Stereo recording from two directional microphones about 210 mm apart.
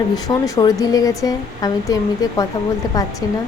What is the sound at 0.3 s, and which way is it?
Speech, 15° left (ahead or behind).